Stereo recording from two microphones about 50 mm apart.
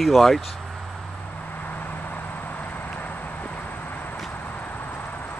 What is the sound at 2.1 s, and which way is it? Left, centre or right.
Vehicle, left.